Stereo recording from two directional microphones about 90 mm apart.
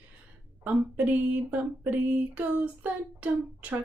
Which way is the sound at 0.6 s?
20° right (ahead or behind).